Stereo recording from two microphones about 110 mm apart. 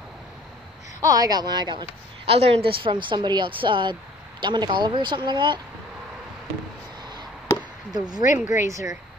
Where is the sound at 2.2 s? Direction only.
60° right (ahead or behind); by 5.5 s 45° right (ahead or behind).